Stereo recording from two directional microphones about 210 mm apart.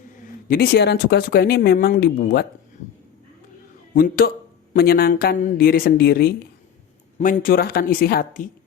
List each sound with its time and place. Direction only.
0.4 s speech: 45° left (ahead or behind)
3.9 s speech: 45° left (ahead or behind)